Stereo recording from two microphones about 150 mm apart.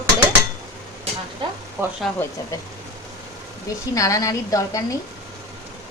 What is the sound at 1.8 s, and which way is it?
Speech, 15° right (ahead or behind).